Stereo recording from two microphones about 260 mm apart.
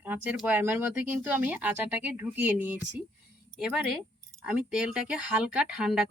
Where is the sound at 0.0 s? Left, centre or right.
Centre.